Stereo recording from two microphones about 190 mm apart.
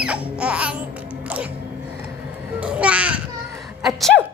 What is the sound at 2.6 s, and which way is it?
Babbling, 5° right (ahead or behind).